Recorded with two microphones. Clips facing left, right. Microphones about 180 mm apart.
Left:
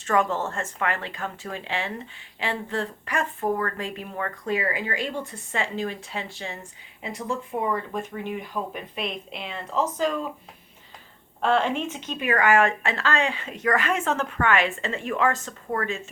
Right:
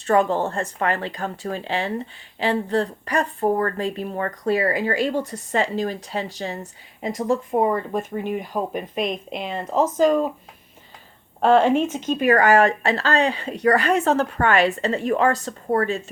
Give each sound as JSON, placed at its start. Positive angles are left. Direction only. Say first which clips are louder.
{"t": 0.0, "sound": "speech", "louder": "right 5 dB", "side_deg": -35}
{"t": 11.3, "sound": "speech", "louder": "right 7 dB", "side_deg": -40}